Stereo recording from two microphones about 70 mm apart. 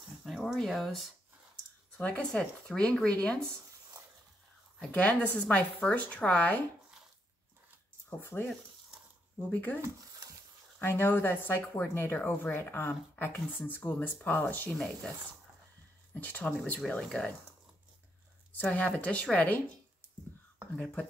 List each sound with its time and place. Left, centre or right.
0.2 s speech: centre
2.0 s speech: centre
4.9 s a woman's voice: left
8.2 s speech: left
9.5 s a woman's voice: left
10.8 s a woman's voice: left
16.2 s a woman's voice: left
18.6 s a woman's voice: left
20.7 s speech: centre